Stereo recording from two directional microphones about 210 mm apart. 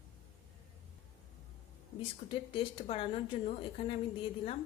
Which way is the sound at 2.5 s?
25° left (ahead or behind).